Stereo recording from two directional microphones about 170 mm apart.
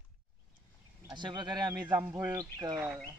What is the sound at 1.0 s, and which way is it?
Speech, 25° right (ahead or behind).